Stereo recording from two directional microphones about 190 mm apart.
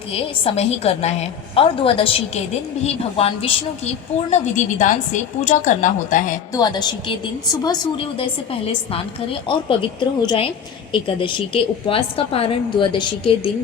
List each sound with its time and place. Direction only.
0.1 s a woman's voice: 30° left (ahead or behind)
6.5 s a woman's voice: 20° left (ahead or behind)